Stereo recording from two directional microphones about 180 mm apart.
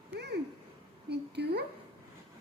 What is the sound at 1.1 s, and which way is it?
Speech, 65° right (ahead or behind).